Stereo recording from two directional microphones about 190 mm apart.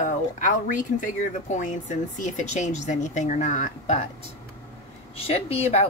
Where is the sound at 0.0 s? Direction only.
45° left (ahead or behind).